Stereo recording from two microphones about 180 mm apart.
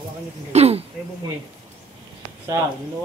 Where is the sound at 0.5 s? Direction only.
35° right (ahead or behind).